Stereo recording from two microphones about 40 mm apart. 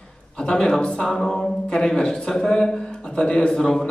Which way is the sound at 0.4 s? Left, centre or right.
Left.